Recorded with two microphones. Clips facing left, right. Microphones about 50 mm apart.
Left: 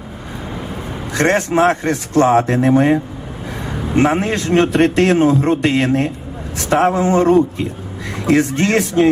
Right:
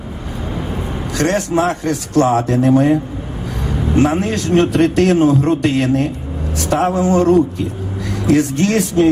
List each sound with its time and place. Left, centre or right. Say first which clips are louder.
1.1 s a man's voice: left 2 dB; left